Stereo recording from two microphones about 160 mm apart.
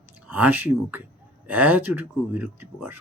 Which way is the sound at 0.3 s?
10° right (ahead or behind).